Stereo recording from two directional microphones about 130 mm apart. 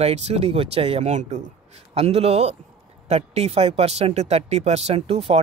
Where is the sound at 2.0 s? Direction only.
50° right (ahead or behind).